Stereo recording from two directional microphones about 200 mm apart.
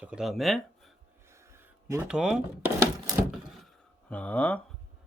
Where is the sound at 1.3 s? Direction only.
15° right (ahead or behind).